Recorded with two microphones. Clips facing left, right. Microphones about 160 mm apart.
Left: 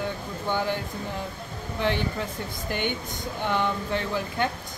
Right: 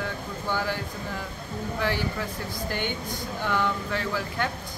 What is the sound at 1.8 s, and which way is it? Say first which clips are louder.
Speech: left 2 dB; 20° left (ahead or behind).